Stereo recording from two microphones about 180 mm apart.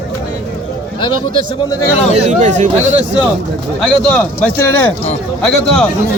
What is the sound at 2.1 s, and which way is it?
Speech, 40° right (ahead or behind).